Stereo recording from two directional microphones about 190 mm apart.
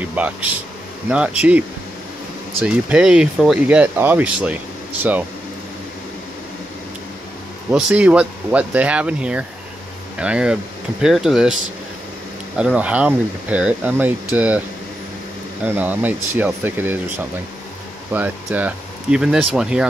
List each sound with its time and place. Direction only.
0.0 s speech: 5° right (ahead or behind)
2.6 s speech: 5° right (ahead or behind)
7.7 s speech: 5° right (ahead or behind)
12.5 s speech: 5° right (ahead or behind)
15.6 s speech: 10° right (ahead or behind)
18.1 s speech: 10° right (ahead or behind)